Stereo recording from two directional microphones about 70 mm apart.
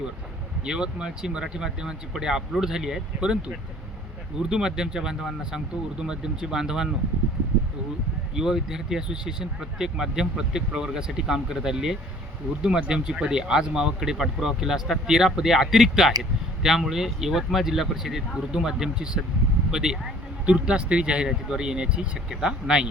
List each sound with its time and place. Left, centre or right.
0.6 s speech: centre
8.4 s speech: centre